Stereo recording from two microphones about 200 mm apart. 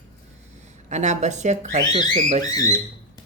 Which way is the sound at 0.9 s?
35° right (ahead or behind).